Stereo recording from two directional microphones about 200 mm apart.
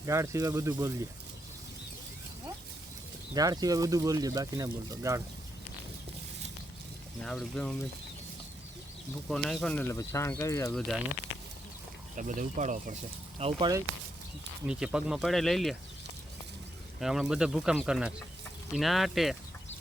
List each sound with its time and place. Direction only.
0.0 s speech: 15° right (ahead or behind)
3.3 s speech: 20° right (ahead or behind)
7.2 s speech: 5° left (ahead or behind)
9.3 s speech: centre (ahead or behind)
12.1 s speech: 40° right (ahead or behind)
13.4 s speech: 20° right (ahead or behind)
14.7 s speech: 5° right (ahead or behind)
17.0 s speech: centre (ahead or behind)